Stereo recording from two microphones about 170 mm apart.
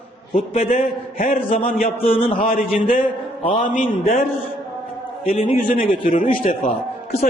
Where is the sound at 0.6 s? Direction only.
50° left (ahead or behind).